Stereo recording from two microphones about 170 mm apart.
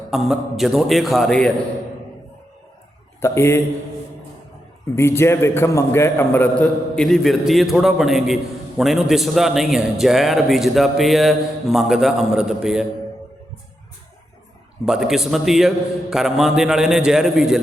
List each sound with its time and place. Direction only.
0.1 s a man's voice: centre (ahead or behind)
3.2 s a man's voice: 15° left (ahead or behind)
4.9 s a man's voice: 15° left (ahead or behind); by 12.8 s 5° right (ahead or behind)
14.8 s a man's voice: 5° right (ahead or behind)